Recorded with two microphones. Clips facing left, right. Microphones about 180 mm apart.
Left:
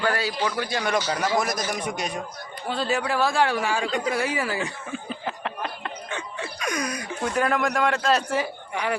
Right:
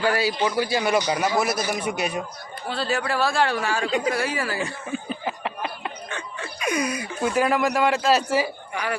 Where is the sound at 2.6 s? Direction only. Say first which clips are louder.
Even; 20° left (ahead or behind).